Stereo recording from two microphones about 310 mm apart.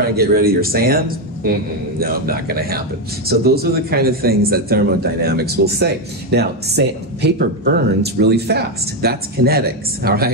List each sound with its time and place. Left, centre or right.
0.1 s a man's voice: right